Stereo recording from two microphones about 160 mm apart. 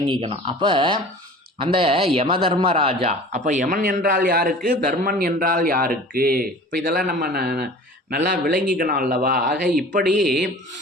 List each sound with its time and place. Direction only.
0.1 s speech: 35° right (ahead or behind); by 7.7 s 90° right
8.1 s speech: 70° right (ahead or behind)
10.2 s speech: centre (ahead or behind)